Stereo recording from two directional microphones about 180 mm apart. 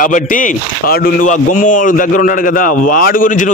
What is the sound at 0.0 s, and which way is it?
A man's voice, 45° left (ahead or behind).